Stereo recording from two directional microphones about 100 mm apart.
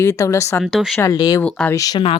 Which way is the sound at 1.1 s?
40° left (ahead or behind).